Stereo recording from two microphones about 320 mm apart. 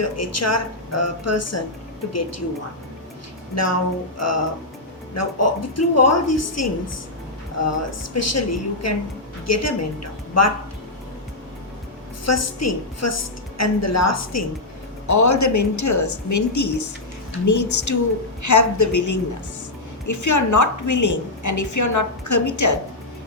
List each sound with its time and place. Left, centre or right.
0.0 s a woman's voice: left
3.5 s a woman's voice: left
12.2 s a woman's voice: left